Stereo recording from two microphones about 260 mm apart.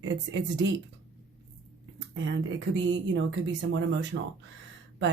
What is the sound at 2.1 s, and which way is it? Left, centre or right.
Speech, right.